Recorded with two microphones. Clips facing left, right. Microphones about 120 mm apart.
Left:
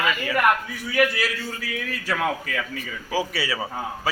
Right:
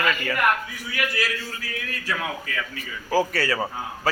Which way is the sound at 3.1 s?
Centre (ahead or behind).